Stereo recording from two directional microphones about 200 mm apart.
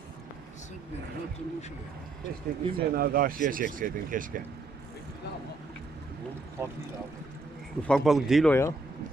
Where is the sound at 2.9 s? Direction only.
50° right (ahead or behind).